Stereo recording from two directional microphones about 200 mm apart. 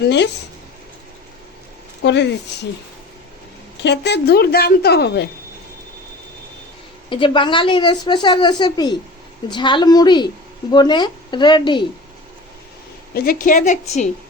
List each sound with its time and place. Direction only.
2.0 s a woman's voice: 60° left (ahead or behind)
3.8 s a woman's voice: 60° left (ahead or behind)
7.1 s a woman's voice: 25° left (ahead or behind)
13.1 s a woman's voice: 45° left (ahead or behind)